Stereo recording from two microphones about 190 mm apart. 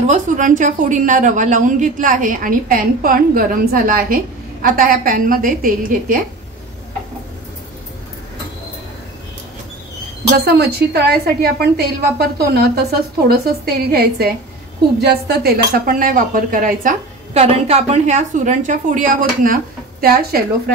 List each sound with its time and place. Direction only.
0.0 s a woman's voice: 40° right (ahead or behind)
10.3 s a woman's voice: 55° right (ahead or behind)
17.4 s a woman's voice: 35° right (ahead or behind); by 20.7 s 55° right (ahead or behind)